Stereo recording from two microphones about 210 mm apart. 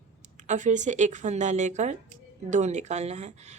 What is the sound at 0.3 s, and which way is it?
A woman's voice, 35° right (ahead or behind).